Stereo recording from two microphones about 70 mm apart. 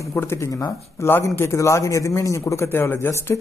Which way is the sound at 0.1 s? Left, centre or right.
Left.